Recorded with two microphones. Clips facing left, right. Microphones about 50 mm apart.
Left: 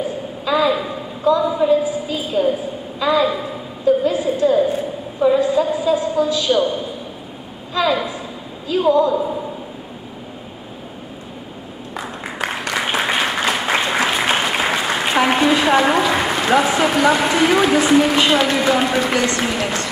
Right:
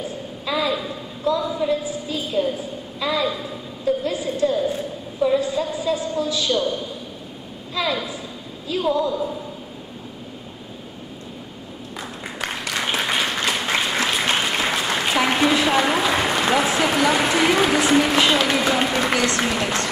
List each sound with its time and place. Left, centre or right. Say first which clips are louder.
0.5 s a sound: left 6 dB; centre
1.6 s a woman's voice: left 7 dB; centre
2.5 s a sound: left 5 dB; centre
7.8 s a man's voice: left 6 dB; centre
8.9 s speech: left 7 dB; left
12.0 s applause: left 5 dB; centre
19.2 s speech: left 2 dB; centre